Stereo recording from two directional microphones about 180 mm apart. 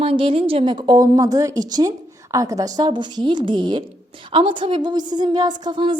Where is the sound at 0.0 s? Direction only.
30° right (ahead or behind).